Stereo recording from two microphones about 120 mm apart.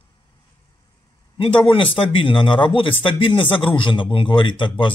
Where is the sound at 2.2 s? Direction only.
45° left (ahead or behind).